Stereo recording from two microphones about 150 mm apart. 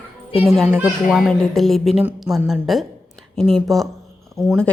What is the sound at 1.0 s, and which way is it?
Speech, centre (ahead or behind).